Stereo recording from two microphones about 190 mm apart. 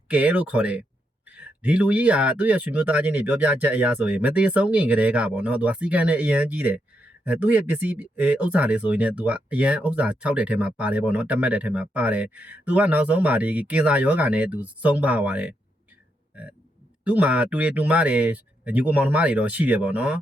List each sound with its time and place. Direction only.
0.1 s speech: 5° right (ahead or behind)
16.3 s burping: 5° right (ahead or behind)
17.0 s speech: 5° right (ahead or behind)